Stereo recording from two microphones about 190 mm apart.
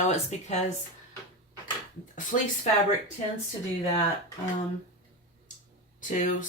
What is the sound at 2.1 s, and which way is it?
Speech, 45° left (ahead or behind).